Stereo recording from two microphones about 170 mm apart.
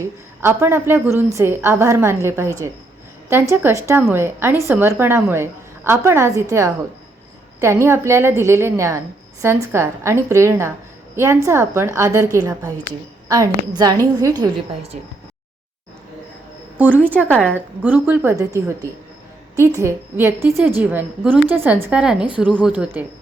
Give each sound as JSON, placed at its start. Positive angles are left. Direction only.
{"t": 0.0, "sound": "a woman's voice", "side_deg": -15}
{"t": 14.9, "sound": "speech", "side_deg": -45}
{"t": 16.7, "sound": "a woman's voice", "side_deg": -10}
{"t": 17.2, "sound": "a woman's voice", "side_deg": 5}
{"t": 17.5, "sound": "a woman's voice", "side_deg": -10}
{"t": 22.7, "sound": "a woman's voice", "side_deg": -10}